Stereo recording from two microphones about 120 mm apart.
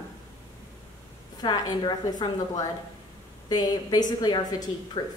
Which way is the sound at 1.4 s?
35° left (ahead or behind).